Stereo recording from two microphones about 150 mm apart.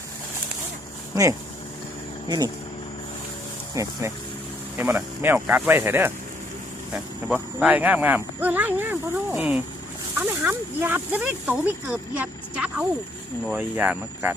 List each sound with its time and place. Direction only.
1.1 s speech: 25° right (ahead or behind)
3.8 s speech: 20° right (ahead or behind)